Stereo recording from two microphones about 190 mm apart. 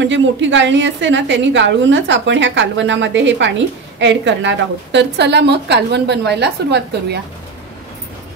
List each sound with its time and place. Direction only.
0.0 s a woman's voice: 75° right (ahead or behind)